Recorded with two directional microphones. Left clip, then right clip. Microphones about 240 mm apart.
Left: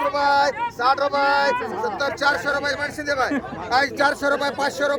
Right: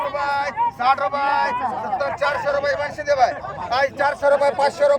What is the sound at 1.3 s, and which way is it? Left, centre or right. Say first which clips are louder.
Speech: even; left.